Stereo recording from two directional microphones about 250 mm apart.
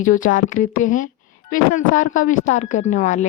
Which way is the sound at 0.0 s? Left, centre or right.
Left.